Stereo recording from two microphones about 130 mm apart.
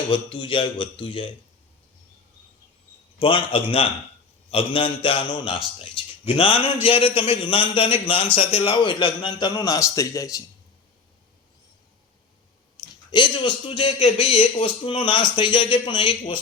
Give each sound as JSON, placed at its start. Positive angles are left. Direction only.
{"t": 0.1, "sound": "a man's voice", "side_deg": 40}
{"t": 3.2, "sound": "a man's voice", "side_deg": 40}
{"t": 8.4, "sound": "a man's voice", "side_deg": 55}
{"t": 12.7, "sound": "a man's voice", "side_deg": 35}
{"t": 14.8, "sound": "a man's voice", "side_deg": 40}